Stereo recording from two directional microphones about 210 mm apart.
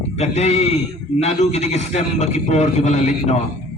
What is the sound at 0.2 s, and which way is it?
A man's voice, 30° left (ahead or behind).